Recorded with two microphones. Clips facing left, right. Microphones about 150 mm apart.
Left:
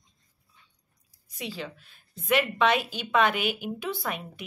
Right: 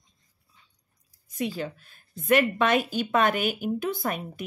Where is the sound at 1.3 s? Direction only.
50° right (ahead or behind).